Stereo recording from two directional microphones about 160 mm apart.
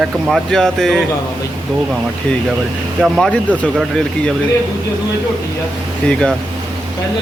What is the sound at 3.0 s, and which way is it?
Speech, centre (ahead or behind).